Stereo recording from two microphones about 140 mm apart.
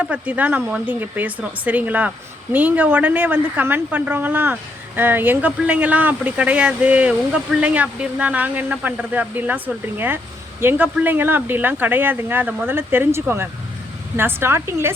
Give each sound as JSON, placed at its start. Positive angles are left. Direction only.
{"t": 0.0, "sound": "speech", "side_deg": -10}